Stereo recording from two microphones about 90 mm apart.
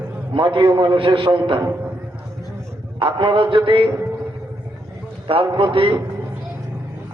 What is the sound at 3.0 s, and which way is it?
Speech, 70° right (ahead or behind).